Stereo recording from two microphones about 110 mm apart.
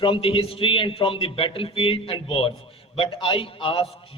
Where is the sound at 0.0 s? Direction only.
55° left (ahead or behind).